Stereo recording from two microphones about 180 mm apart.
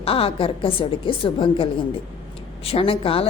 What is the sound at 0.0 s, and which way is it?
Speech, 30° left (ahead or behind).